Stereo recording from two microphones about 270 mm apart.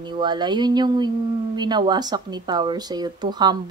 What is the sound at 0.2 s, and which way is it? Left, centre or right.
Speech, centre.